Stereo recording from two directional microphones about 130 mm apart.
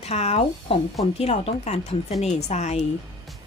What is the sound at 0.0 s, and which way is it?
A woman's voice, 55° left (ahead or behind).